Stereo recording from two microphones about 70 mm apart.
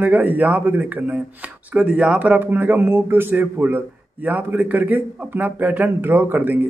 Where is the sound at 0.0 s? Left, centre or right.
Right.